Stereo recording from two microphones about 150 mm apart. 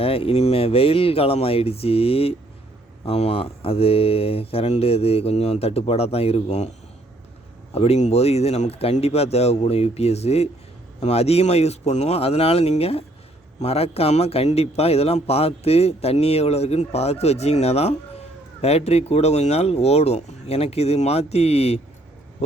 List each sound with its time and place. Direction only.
0.0 s a man's voice: 40° left (ahead or behind)